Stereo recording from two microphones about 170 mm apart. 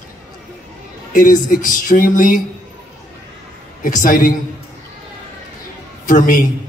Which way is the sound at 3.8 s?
55° left (ahead or behind).